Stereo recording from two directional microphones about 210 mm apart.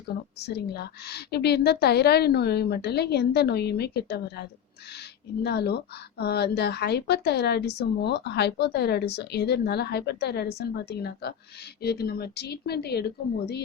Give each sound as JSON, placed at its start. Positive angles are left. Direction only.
{"t": 0.3, "sound": "a woman's voice", "side_deg": 50}